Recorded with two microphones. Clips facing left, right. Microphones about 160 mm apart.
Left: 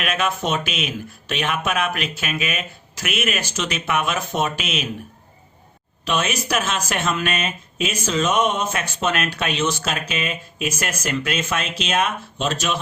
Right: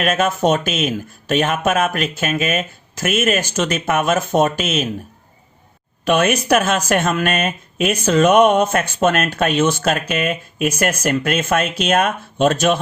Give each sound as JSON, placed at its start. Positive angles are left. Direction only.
{"t": 0.0, "sound": "speech", "side_deg": -45}
{"t": 6.1, "sound": "speech", "side_deg": -55}